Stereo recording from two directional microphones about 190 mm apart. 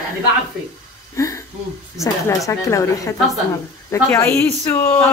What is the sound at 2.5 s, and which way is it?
A woman's voice, 15° left (ahead or behind).